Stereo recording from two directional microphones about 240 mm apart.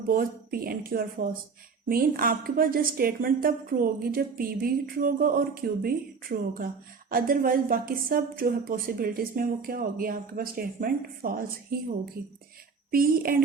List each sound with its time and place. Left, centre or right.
0.1 s a woman's voice: right
12.9 s a woman's voice: right